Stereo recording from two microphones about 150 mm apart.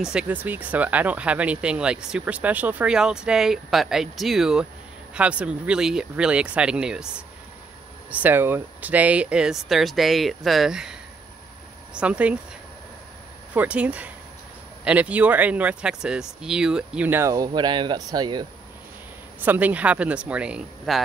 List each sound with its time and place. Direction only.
0.0 s speech: 5° right (ahead or behind)
8.1 s speech: 10° right (ahead or behind)
13.5 s speech: 10° right (ahead or behind)
17.5 s speech: 30° right (ahead or behind)
19.4 s speech: 10° right (ahead or behind)